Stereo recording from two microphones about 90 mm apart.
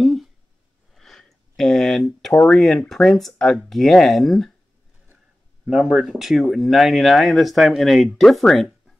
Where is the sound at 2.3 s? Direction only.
15° left (ahead or behind).